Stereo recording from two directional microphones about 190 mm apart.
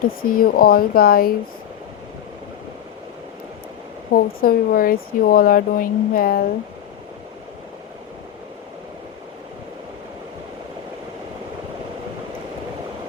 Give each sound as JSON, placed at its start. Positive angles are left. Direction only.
{"t": 0.2, "sound": "speech", "side_deg": 50}
{"t": 4.1, "sound": "speech", "side_deg": 50}